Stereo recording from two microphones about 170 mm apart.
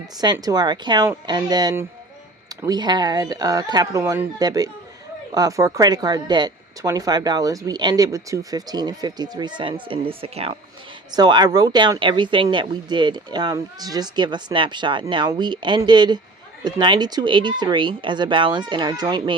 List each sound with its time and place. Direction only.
0.4 s speech: 25° right (ahead or behind)
11.1 s speech: 25° right (ahead or behind)